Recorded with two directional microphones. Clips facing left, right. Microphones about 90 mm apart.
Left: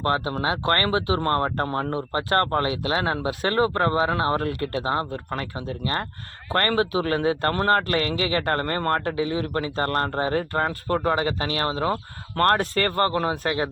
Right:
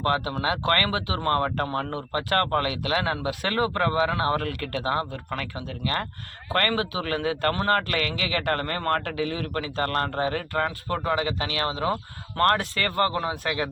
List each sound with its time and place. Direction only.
0.0 s speech: 30° left (ahead or behind)